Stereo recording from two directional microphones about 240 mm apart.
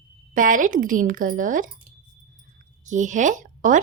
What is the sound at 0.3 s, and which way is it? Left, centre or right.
A woman's voice, right.